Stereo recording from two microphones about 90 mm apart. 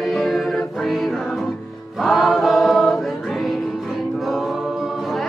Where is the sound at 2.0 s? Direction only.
Centre (ahead or behind).